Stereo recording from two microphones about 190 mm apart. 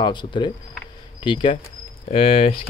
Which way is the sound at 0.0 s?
25° left (ahead or behind).